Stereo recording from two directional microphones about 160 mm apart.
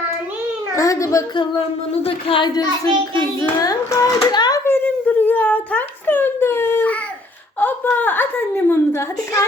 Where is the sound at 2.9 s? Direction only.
30° right (ahead or behind).